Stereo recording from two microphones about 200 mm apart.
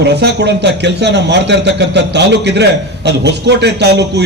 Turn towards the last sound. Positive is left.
turn(degrees=-55)  # may be behind; listen again after turning